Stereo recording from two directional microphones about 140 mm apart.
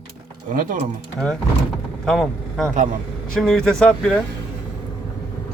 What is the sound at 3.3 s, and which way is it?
Speech, 5° left (ahead or behind).